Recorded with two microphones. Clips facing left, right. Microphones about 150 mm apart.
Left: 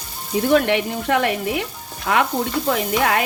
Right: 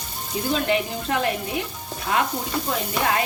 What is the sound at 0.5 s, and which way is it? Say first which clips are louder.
Sizzle: left 5 dB; 70° left (ahead or behind).